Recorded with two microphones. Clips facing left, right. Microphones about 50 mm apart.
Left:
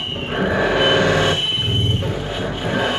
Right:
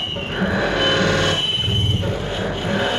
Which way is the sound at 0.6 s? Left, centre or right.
Centre.